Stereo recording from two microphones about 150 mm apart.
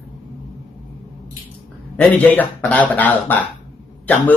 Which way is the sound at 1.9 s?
10° left (ahead or behind).